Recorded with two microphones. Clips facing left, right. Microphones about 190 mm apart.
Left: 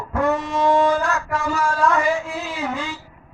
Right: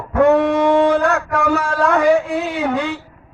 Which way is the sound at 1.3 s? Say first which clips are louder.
Right 5 dB; 60° right (ahead or behind).